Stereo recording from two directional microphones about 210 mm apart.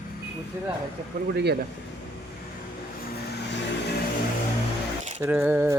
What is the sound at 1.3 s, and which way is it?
Speech, 50° right (ahead or behind).